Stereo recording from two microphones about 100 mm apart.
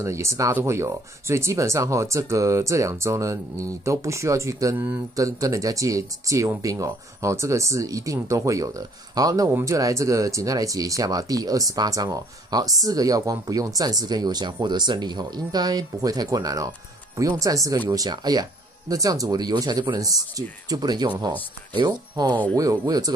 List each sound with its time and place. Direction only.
0.0 s speech: 30° right (ahead or behind)
4.7 s speech: 20° right (ahead or behind)
5.1 s speech: 35° right (ahead or behind)